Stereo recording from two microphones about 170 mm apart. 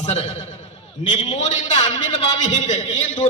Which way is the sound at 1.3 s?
40° left (ahead or behind).